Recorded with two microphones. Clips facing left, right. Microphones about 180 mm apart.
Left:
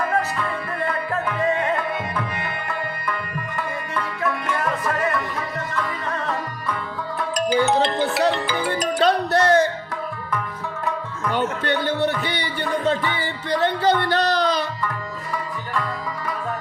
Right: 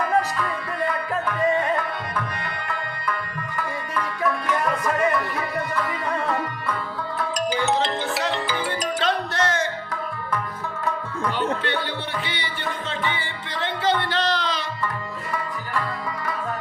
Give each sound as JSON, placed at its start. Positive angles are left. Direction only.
{"t": 7.3, "sound": "music", "side_deg": 60}
{"t": 9.0, "sound": "music", "side_deg": 40}
{"t": 11.6, "sound": "music", "side_deg": 45}